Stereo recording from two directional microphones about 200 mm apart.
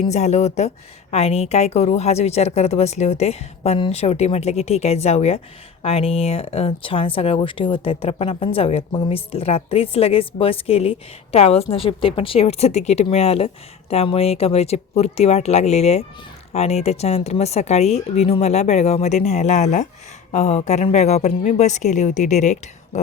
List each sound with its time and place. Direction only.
0.1 s a woman's voice: 35° left (ahead or behind)